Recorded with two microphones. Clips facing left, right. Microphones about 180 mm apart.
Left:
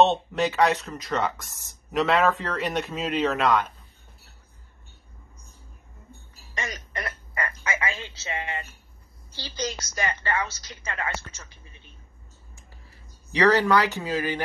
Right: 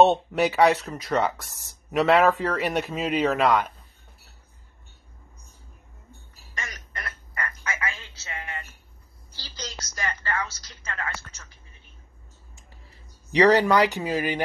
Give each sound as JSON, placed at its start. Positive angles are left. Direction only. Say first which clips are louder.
{"t": 0.0, "sound": "a man's voice", "louder": "right 2 dB", "side_deg": -10}
{"t": 6.6, "sound": "a sound", "louder": "left 5 dB", "side_deg": 20}
{"t": 9.4, "sound": "speech", "louder": "left 8 dB", "side_deg": 15}
{"t": 13.3, "sound": "speech", "louder": "right 2 dB", "side_deg": -15}